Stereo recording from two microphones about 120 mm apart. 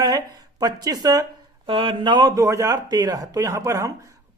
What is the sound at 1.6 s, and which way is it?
Speech, 50° right (ahead or behind).